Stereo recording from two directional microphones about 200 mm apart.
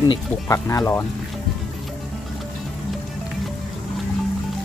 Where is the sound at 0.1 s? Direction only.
15° left (ahead or behind).